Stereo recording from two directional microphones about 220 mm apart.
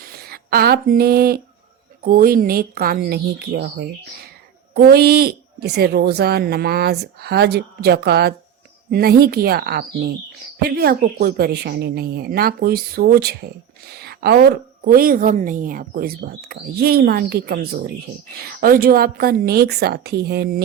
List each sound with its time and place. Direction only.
0.0 s a woman's voice: 45° right (ahead or behind)